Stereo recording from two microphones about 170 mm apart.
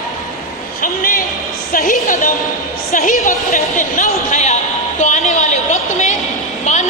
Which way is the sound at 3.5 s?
45° left (ahead or behind).